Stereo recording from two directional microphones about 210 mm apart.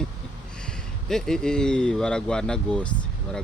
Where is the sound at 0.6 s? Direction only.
5° left (ahead or behind).